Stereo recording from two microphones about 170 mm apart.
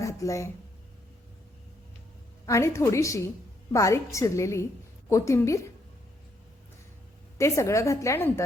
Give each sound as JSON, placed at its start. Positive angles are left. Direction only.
{"t": 0.0, "sound": "speech", "side_deg": 20}
{"t": 2.5, "sound": "a woman's voice", "side_deg": 15}
{"t": 7.3, "sound": "a woman's voice", "side_deg": 15}